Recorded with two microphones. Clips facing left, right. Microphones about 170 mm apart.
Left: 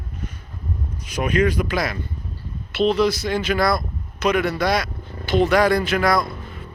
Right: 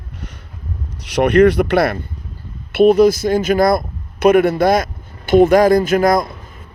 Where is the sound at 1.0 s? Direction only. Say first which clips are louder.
Right 9 dB; 75° right (ahead or behind).